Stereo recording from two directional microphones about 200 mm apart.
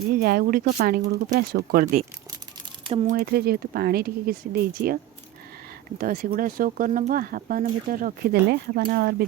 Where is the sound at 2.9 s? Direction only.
30° right (ahead or behind).